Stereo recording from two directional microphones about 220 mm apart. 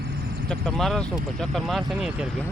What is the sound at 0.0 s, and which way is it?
Vehicle, 45° right (ahead or behind).